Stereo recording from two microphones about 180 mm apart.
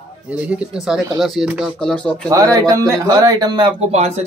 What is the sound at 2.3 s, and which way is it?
Speech, 20° right (ahead or behind).